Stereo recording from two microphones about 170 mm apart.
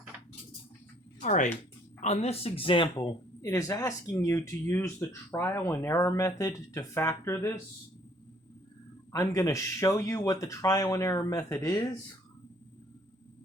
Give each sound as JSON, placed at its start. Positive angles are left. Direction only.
{"t": 1.2, "sound": "speech", "side_deg": 45}
{"t": 3.4, "sound": "speech", "side_deg": 20}
{"t": 9.1, "sound": "speech", "side_deg": 15}